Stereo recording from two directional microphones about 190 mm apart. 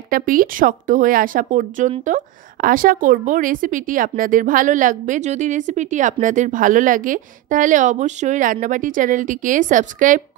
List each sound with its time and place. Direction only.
0.1 s speech: 45° right (ahead or behind)